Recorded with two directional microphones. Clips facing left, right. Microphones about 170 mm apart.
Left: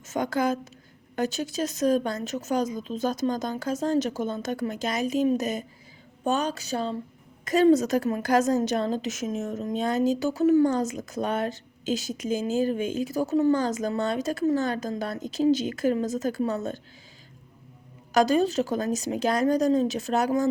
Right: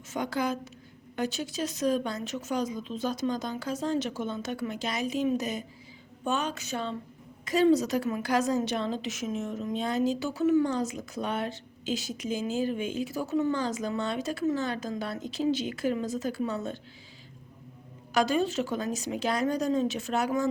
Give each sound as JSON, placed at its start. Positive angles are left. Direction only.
{"t": 0.1, "sound": "a woman's voice", "side_deg": 45}
{"t": 7.4, "sound": "a woman's voice", "side_deg": 45}
{"t": 18.1, "sound": "a woman's voice", "side_deg": 40}